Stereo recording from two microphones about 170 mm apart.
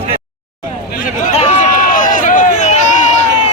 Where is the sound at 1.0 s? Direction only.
40° left (ahead or behind).